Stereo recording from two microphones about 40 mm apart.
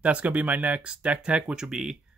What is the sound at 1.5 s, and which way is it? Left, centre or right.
Speech, centre.